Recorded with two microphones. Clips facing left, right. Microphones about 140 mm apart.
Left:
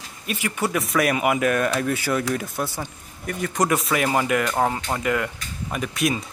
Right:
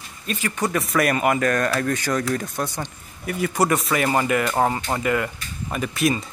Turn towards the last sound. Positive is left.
turn(degrees=0)  # may be behind; listen again after turning